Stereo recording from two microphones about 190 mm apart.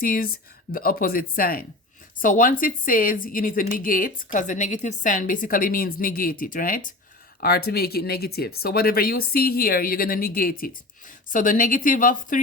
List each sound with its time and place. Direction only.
0.0 s a woman's voice: 50° left (ahead or behind)